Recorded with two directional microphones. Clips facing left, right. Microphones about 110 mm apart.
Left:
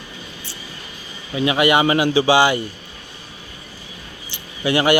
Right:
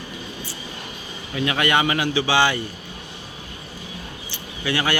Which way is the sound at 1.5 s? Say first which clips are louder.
Left 5 dB; 15° left (ahead or behind).